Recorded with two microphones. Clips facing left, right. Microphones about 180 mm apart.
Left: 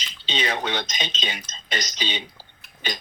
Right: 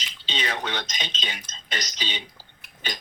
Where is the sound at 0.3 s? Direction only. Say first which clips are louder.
Left 4 dB; 20° left (ahead or behind).